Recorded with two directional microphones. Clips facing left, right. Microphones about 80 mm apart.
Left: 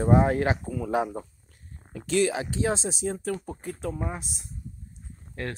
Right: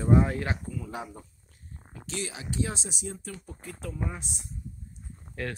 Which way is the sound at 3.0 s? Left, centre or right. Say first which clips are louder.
Left 10 dB; left.